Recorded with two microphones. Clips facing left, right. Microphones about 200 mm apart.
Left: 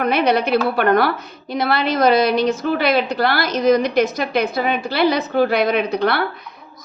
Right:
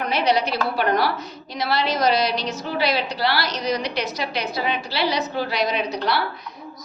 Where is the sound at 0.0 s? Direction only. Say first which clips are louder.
Left 4 dB; 55° left (ahead or behind).